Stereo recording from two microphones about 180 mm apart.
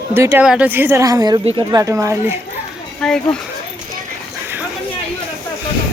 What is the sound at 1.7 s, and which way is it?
Speech, 20° right (ahead or behind).